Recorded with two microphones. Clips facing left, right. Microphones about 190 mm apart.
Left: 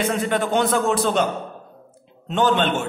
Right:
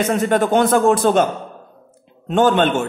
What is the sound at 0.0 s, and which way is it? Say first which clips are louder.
A man's voice: right 5 dB; 45° right (ahead or behind).